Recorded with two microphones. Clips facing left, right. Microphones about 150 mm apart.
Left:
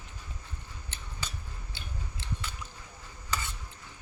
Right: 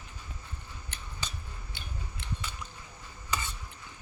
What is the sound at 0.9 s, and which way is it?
Scissors, 25° left (ahead or behind).